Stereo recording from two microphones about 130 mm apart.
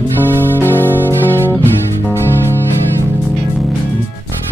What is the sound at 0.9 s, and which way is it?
Music, 15° right (ahead or behind).